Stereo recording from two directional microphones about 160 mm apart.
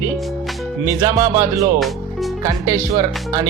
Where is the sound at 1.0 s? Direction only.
20° right (ahead or behind).